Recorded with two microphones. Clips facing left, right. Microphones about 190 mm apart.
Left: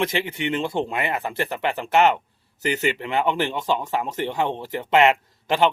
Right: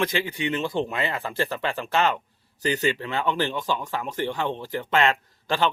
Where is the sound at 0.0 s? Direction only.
25° left (ahead or behind).